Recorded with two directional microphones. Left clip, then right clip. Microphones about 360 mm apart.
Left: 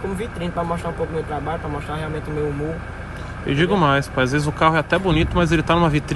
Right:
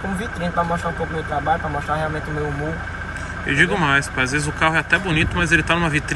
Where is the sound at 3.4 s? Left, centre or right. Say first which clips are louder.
Even; centre.